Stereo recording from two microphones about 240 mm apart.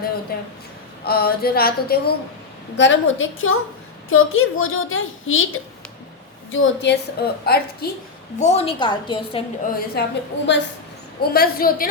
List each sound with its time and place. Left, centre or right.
0.3 s a sound: left
2.7 s a woman's voice: left
6.5 s a woman's voice: left
8.4 s a woman's voice: left
9.9 s a woman's voice: left
11.2 s a sound: left